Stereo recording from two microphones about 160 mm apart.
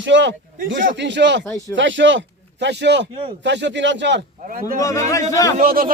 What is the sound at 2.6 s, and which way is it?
A man's voice, 90° right.